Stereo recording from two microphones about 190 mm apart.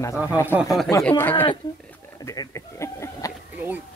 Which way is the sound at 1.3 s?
25° left (ahead or behind).